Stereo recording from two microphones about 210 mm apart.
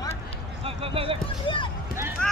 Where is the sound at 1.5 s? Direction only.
20° left (ahead or behind).